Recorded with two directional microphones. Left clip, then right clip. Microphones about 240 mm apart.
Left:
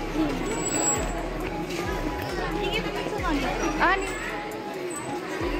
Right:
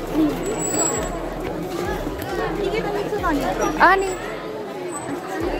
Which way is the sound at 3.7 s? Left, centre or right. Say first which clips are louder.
Right 9 dB; right.